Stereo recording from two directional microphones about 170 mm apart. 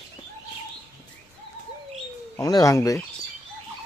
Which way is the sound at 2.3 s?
20° left (ahead or behind).